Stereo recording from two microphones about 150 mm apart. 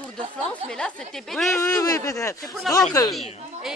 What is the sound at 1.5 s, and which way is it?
Speech, 20° left (ahead or behind).